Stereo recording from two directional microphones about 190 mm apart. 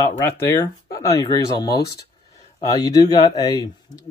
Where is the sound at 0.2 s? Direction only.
15° left (ahead or behind).